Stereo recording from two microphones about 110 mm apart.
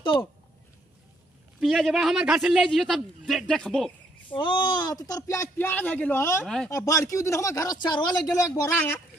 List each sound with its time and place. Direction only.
0.0 s speech: 50° left (ahead or behind)
1.6 s a man's voice: centre (ahead or behind)
4.3 s speech: 50° left (ahead or behind); by 5.7 s 25° left (ahead or behind)
5.7 s a man's voice: 15° left (ahead or behind)
6.4 s a man's voice: 5° left (ahead or behind)
6.7 s speech: 30° left (ahead or behind)
8.4 s speech: 25° left (ahead or behind)